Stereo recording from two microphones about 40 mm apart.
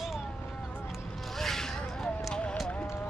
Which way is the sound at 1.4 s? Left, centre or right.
Centre.